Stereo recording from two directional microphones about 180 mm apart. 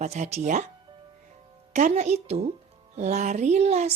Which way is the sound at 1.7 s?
40° right (ahead or behind).